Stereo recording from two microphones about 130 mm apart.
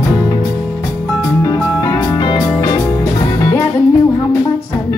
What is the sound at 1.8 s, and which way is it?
Music, 25° left (ahead or behind).